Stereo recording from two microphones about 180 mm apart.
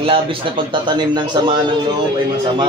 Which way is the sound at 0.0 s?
30° right (ahead or behind).